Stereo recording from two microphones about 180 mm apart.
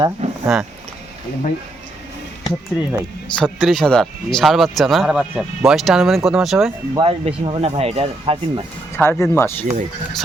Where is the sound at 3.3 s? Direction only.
Centre (ahead or behind).